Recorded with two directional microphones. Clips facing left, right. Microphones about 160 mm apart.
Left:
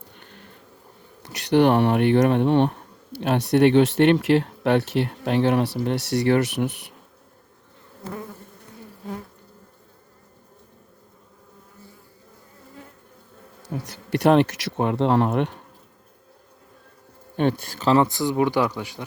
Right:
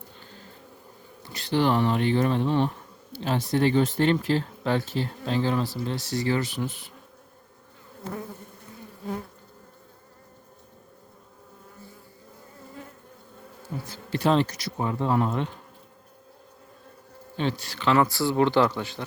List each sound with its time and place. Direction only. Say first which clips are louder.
0.2 s insect: even; 65° left (ahead or behind)
1.5 s speech: left 6 dB; 60° left (ahead or behind)
14.1 s speech: left 5 dB; 65° left (ahead or behind)
17.3 s speech: left 6 dB; 55° left (ahead or behind)
18.0 s speech: left 1 dB; 20° left (ahead or behind)